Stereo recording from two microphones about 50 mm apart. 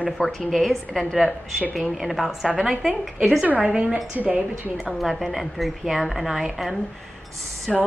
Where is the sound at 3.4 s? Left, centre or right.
Right.